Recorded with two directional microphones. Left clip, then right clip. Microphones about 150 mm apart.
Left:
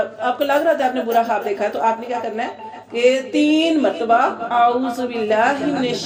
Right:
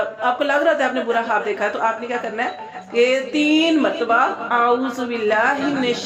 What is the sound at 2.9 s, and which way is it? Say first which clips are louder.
A woman's voice: left 1 dB; 35° left (ahead or behind).